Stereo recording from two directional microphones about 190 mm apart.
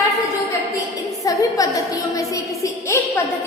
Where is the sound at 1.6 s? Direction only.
20° left (ahead or behind).